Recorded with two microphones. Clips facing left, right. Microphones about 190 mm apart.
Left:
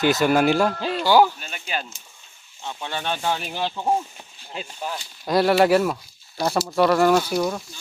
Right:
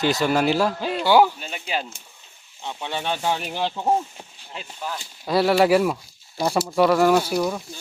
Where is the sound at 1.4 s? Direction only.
20° right (ahead or behind).